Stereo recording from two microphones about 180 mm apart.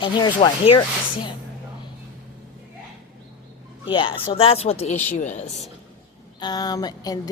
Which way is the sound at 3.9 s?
30° left (ahead or behind).